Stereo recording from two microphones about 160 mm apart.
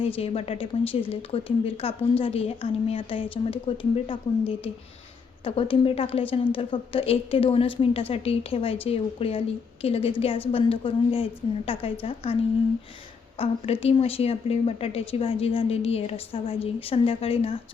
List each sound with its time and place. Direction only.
0.0 s a woman's voice: 40° left (ahead or behind)
13.4 s a woman's voice: 40° left (ahead or behind)